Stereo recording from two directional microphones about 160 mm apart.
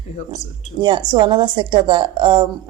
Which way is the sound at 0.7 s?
30° right (ahead or behind).